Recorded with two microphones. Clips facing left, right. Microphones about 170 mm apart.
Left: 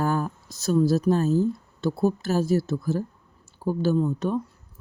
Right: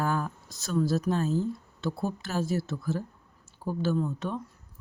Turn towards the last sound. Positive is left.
turn(degrees=35)  # may be behind; listen again after turning